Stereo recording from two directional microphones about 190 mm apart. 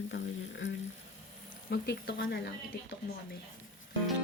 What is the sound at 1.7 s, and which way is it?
Speech, 60° left (ahead or behind).